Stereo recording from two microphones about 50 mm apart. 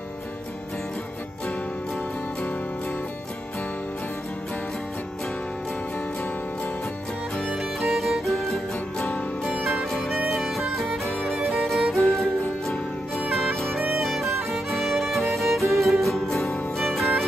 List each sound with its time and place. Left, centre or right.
7.5 s music: centre